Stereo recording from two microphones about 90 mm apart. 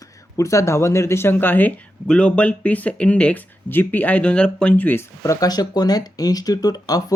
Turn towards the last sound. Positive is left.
turn(degrees=45)  # may be behind; listen again after turning